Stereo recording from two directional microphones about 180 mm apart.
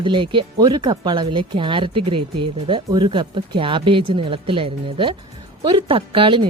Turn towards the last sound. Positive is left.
turn(degrees=-30)  # may be behind; listen again after turning